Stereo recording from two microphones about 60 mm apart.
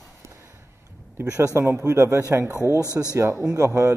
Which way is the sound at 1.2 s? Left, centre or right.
Right.